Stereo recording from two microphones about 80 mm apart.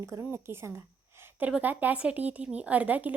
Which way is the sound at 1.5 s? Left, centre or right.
Centre.